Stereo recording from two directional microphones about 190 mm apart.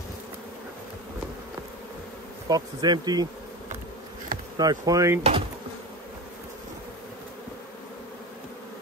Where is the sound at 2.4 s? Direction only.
20° right (ahead or behind).